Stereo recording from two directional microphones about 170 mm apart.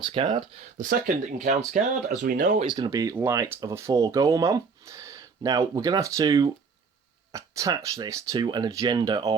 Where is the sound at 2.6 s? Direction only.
30° right (ahead or behind).